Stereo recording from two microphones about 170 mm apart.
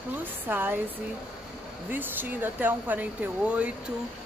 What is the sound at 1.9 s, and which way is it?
Speech, 10° right (ahead or behind).